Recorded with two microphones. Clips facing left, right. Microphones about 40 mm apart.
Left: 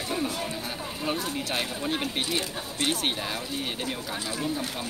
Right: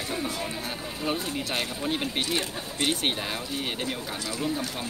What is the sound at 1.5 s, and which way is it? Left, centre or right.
Speech, centre.